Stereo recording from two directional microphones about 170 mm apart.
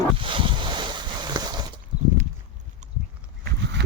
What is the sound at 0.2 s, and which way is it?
Boat, 30° right (ahead or behind).